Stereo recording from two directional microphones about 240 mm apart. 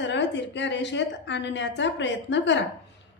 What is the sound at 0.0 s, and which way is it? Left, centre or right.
A woman's voice, left.